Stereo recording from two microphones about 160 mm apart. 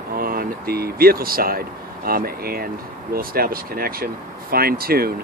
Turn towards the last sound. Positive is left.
turn(degrees=-70)  # may be behind; listen again after turning